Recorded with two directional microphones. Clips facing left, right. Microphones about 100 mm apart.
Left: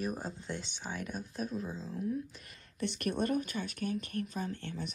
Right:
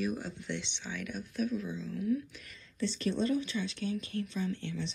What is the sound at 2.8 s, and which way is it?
Speech, 60° left (ahead or behind).